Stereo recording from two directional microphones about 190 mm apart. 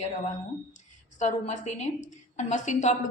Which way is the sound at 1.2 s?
35° left (ahead or behind).